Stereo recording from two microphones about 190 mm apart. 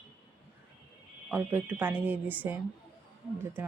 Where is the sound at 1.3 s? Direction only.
10° right (ahead or behind).